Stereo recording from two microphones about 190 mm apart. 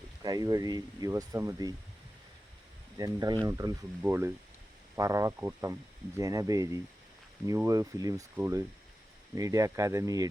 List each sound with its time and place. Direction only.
0.2 s speech: 20° right (ahead or behind)
3.0 s speech: 20° right (ahead or behind)